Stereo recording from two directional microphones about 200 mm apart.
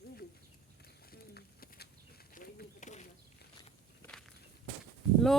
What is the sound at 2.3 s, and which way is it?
Bird, 45° left (ahead or behind).